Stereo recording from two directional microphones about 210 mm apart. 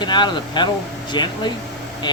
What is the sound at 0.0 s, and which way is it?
Speech, 20° left (ahead or behind).